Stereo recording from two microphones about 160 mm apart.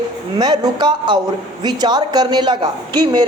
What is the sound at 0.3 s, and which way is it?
A woman's voice, 25° right (ahead or behind).